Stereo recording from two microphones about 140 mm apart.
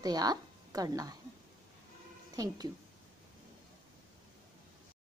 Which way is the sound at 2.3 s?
25° right (ahead or behind).